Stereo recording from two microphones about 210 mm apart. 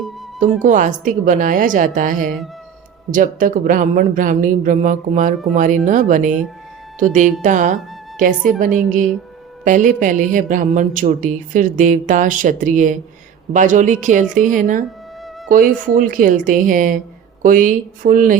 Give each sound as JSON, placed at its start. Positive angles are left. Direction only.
{"t": 0.6, "sound": "speech", "side_deg": -35}